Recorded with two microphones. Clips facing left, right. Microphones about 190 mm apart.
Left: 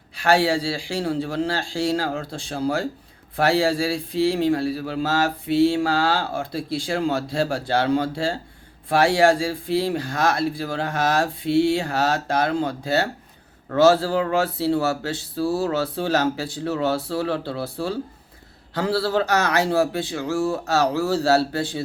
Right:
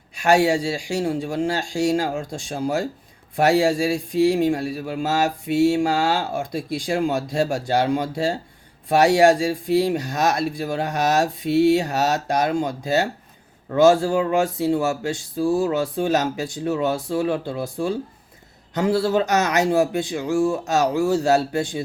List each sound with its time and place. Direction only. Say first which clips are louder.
0.2 s speech: right 2 dB; 15° right (ahead or behind)